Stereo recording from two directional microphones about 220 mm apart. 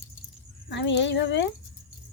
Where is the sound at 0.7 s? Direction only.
55° left (ahead or behind).